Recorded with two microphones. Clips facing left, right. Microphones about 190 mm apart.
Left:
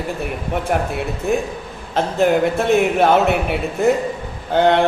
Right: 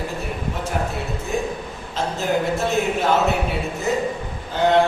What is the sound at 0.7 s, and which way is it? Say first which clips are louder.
Speech: left 5 dB; 65° left (ahead or behind).